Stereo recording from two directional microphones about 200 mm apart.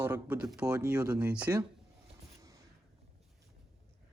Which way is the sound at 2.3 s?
15° right (ahead or behind).